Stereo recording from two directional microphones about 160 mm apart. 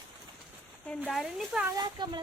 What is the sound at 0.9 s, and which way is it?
Speech, centre (ahead or behind).